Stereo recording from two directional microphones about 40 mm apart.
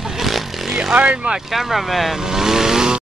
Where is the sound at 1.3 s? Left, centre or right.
Centre.